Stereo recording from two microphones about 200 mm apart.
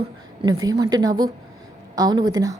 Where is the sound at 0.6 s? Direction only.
15° right (ahead or behind).